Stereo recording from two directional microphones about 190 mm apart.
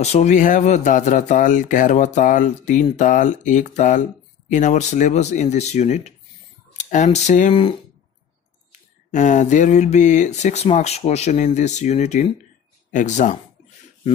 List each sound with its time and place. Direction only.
0.0 s speech: 35° left (ahead or behind)
9.1 s speech: 40° left (ahead or behind)